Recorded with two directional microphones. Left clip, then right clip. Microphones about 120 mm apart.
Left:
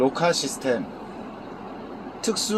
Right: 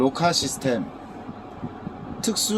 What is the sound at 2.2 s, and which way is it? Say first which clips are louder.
Speech: even; 30° right (ahead or behind).